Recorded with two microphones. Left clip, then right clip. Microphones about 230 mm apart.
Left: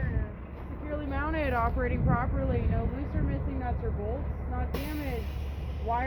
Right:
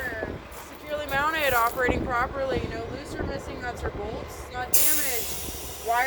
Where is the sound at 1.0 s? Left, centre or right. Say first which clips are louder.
Right 8 dB; left.